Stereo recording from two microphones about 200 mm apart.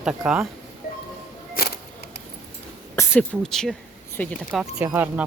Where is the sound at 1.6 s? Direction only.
45° left (ahead or behind).